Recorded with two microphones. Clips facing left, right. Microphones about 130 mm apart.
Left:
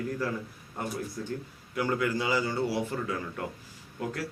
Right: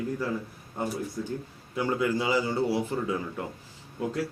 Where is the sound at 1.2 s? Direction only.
10° right (ahead or behind).